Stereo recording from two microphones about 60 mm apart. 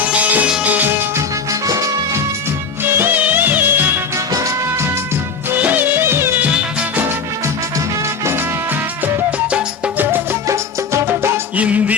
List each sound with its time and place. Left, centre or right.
0.0 s music: right
2.8 s music of bollywood: right
4.3 s music: right
5.5 s music of bollywood: right
6.4 s music: right
10.4 s music: right
11.5 s music: right